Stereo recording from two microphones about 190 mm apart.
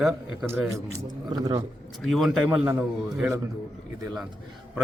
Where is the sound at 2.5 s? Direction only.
15° right (ahead or behind).